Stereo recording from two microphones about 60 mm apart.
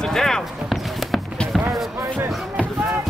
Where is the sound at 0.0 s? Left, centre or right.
Centre.